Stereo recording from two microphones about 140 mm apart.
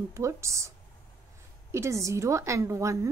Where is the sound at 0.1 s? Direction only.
20° right (ahead or behind).